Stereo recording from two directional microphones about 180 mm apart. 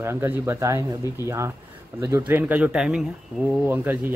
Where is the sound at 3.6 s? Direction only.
10° right (ahead or behind).